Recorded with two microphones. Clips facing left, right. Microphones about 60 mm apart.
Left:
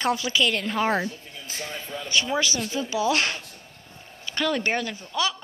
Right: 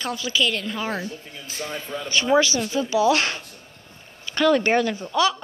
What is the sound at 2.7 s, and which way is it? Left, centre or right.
Speech, centre.